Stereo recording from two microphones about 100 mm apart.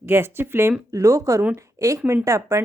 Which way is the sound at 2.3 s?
30° right (ahead or behind).